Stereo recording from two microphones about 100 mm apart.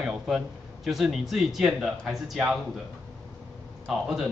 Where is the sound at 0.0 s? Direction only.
5° right (ahead or behind).